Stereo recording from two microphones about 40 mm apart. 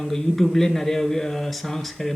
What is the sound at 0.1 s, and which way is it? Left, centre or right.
Speech, centre.